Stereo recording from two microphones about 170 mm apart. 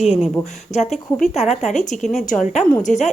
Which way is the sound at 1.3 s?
45° left (ahead or behind).